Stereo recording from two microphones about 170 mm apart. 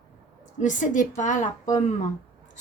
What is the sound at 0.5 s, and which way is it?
Speech, 50° left (ahead or behind).